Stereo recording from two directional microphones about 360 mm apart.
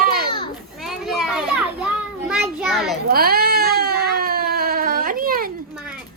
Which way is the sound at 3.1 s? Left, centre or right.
Right.